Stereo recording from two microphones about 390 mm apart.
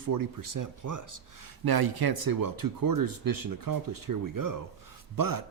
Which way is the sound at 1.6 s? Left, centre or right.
Right.